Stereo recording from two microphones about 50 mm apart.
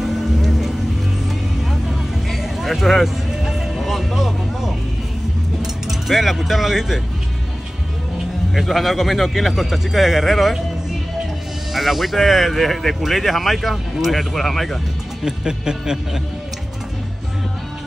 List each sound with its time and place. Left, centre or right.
0.0 s music: centre
5.6 s speech: centre
8.5 s speech: centre
11.7 s speech: centre
15.2 s speech: centre